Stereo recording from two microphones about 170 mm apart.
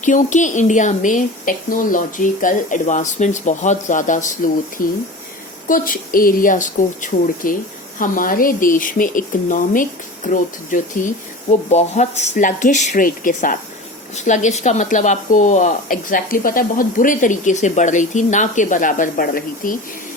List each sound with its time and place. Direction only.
0.0 s speech: 50° left (ahead or behind)